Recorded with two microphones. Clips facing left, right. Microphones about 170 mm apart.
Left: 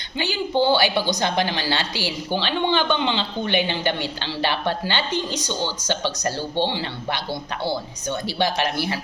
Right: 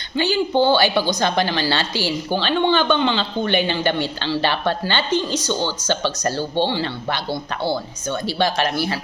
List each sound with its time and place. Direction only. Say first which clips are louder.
0.6 s a woman's voice: right 1 dB; 15° left (ahead or behind)
8.4 s a woman's voice: right 3 dB; 15° left (ahead or behind)